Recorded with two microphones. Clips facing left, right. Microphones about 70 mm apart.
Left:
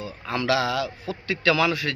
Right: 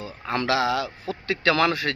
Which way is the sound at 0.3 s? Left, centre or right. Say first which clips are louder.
Right 1 dB; right.